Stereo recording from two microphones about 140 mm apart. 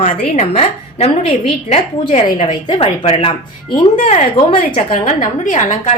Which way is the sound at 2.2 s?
30° left (ahead or behind).